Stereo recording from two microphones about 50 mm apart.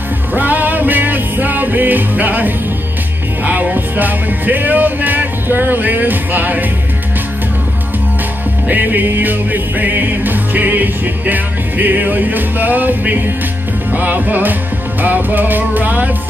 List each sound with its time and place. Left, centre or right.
0.3 s music: right
8.6 s music: right